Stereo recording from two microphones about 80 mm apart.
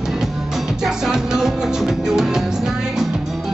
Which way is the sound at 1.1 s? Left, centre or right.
Centre.